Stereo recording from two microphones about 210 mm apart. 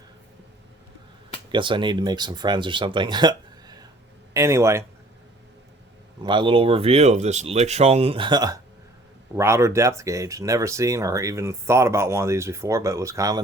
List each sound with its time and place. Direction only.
1.5 s speech: 25° right (ahead or behind)
6.2 s speech: 25° right (ahead or behind)